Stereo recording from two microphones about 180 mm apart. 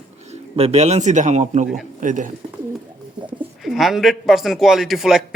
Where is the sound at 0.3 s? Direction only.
35° right (ahead or behind).